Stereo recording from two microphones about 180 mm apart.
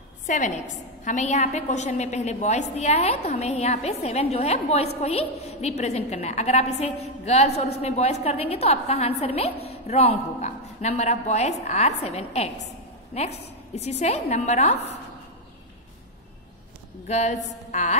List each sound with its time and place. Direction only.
0.3 s a woman's voice: 45° left (ahead or behind)
17.1 s a woman's voice: 40° left (ahead or behind)